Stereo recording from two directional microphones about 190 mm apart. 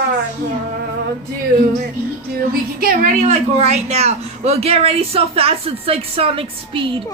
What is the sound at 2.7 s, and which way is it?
A woman's voice, 45° right (ahead or behind).